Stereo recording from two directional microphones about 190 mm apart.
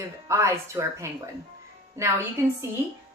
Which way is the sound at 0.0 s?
15° right (ahead or behind).